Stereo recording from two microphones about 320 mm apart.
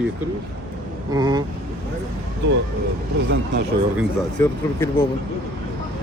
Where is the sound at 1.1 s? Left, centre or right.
Centre.